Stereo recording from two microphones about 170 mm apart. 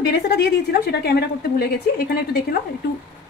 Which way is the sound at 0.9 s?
70° left (ahead or behind).